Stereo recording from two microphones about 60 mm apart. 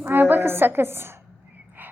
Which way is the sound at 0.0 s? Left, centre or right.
Right.